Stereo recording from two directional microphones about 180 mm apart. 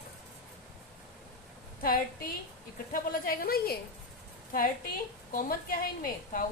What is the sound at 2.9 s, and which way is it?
Speech, 55° left (ahead or behind).